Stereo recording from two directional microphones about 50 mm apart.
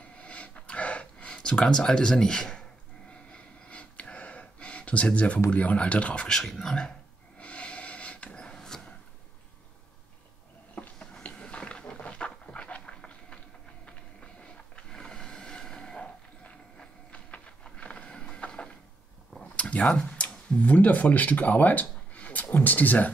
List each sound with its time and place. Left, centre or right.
0.2 s gasp: left
3.1 s a sound: left
5.5 s speech: left
6.2 s speech: centre
7.3 s snort: left
11.2 s a sound: left
17.7 s vehicle: left
19.4 s a sound: left
20.5 s speech: left